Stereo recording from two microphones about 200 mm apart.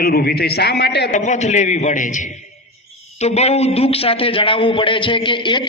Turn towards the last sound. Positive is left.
turn(degrees=25)  # may be behind; listen again after turning